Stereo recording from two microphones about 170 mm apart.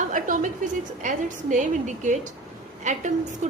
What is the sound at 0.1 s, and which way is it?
A woman's voice, 50° right (ahead or behind).